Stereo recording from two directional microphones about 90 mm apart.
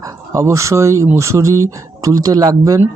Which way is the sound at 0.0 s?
35° right (ahead or behind).